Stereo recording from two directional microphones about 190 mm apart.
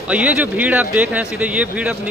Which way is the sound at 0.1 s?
10° right (ahead or behind).